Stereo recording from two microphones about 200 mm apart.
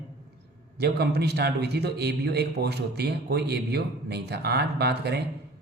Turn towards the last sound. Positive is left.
turn(degrees=-55)  # may be behind; listen again after turning